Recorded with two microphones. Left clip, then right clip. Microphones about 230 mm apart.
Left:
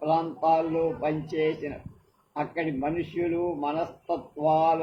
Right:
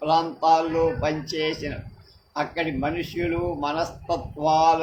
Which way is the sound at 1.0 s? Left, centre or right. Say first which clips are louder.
Right 1 dB; right.